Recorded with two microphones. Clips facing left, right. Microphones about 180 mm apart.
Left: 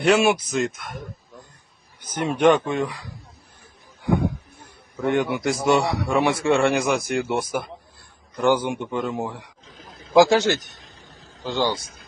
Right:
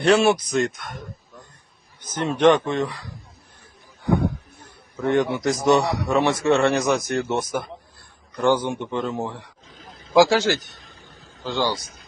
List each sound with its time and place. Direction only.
0.0 s speech: 10° left (ahead or behind)
2.0 s a man's voice: 10° left (ahead or behind)
4.6 s a man's voice: 15° left (ahead or behind)
9.9 s a sound: 45° left (ahead or behind)
10.2 s a man's voice: 20° left (ahead or behind)
11.0 s vehicle: 40° left (ahead or behind)
11.4 s a man's voice: 20° left (ahead or behind)